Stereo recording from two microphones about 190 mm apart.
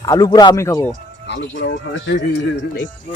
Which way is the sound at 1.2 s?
70° left (ahead or behind).